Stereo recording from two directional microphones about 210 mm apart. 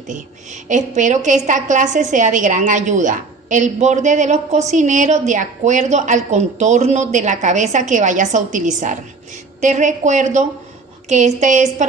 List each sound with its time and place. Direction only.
0.7 s a woman's voice: 35° right (ahead or behind)